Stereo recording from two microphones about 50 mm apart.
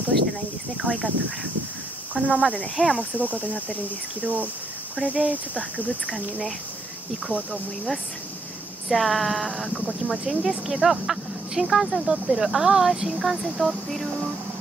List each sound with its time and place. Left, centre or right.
0.8 s speech: right
2.7 s speech: centre
3.3 s cricket: left
4.2 s speech: right
5.8 s speech: left
7.2 s speech: right
8.8 s speech: centre